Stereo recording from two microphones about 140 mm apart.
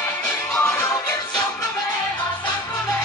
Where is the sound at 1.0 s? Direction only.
25° left (ahead or behind).